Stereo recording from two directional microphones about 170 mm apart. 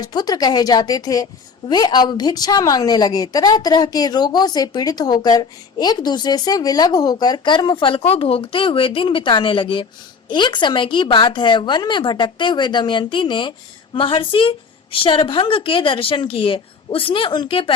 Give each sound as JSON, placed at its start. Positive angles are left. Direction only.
{"t": 0.0, "sound": "a woman's voice", "side_deg": 25}